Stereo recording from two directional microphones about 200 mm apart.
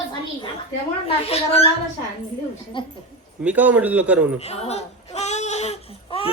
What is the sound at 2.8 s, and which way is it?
Speech, 25° left (ahead or behind).